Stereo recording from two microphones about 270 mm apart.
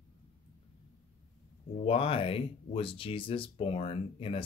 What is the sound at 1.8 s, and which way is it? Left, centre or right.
Speech, left.